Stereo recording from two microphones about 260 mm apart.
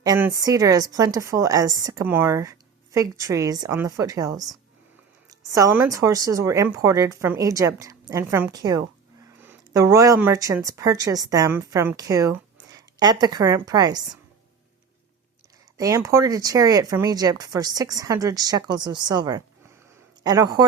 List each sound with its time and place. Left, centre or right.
0.0 s a woman's voice: centre
15.8 s a woman's voice: centre